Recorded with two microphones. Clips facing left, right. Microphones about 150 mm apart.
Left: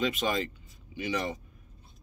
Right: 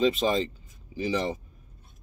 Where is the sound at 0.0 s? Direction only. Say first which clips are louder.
Right 5 dB; 30° right (ahead or behind).